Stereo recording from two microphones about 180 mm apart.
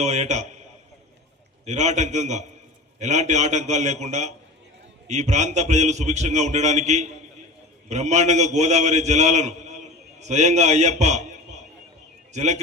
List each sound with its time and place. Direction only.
0.0 s a man's voice: 40° right (ahead or behind)
1.6 s a man's voice: 40° right (ahead or behind)